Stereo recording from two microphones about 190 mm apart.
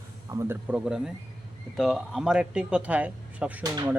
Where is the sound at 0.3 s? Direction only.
15° right (ahead or behind).